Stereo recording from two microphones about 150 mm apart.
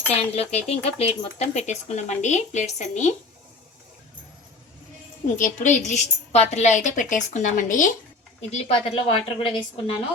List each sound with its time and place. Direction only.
0.1 s speech: 45° left (ahead or behind)
5.5 s speech: 55° left (ahead or behind)
8.4 s a woman's voice: 45° left (ahead or behind)